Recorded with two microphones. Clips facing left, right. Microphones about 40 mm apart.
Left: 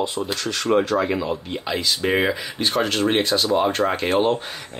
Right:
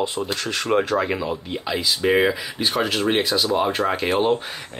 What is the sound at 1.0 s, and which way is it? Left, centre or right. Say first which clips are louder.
Speech: left 1 dB; centre.